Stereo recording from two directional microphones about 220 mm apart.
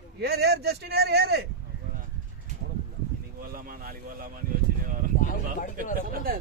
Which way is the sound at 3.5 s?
40° right (ahead or behind).